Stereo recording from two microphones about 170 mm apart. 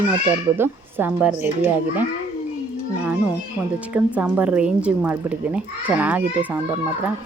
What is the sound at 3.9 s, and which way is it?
Speech, 10° right (ahead or behind).